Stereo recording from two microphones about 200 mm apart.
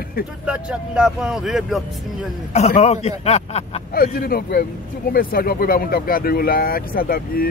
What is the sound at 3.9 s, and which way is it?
Speech, 45° left (ahead or behind).